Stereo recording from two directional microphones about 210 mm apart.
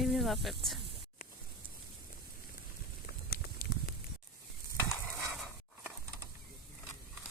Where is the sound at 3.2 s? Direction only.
45° left (ahead or behind).